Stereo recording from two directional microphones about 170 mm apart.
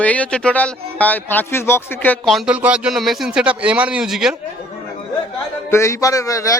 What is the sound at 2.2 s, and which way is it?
Speech, 5° right (ahead or behind).